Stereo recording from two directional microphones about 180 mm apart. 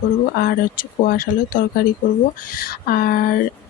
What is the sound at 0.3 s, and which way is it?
Speech, 55° left (ahead or behind).